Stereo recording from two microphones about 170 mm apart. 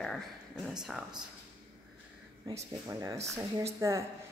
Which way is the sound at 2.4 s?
20° right (ahead or behind).